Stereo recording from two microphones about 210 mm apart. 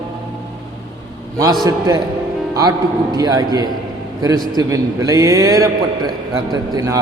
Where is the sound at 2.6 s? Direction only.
20° right (ahead or behind).